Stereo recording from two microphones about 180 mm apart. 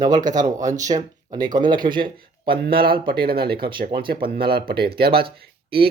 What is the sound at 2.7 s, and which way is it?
Speech, 55° right (ahead or behind).